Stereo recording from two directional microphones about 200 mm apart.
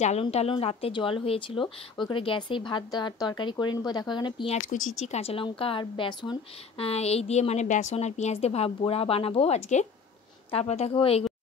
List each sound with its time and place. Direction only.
0.0 s a woman's voice: 30° left (ahead or behind)